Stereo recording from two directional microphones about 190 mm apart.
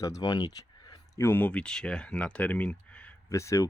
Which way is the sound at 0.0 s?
20° left (ahead or behind).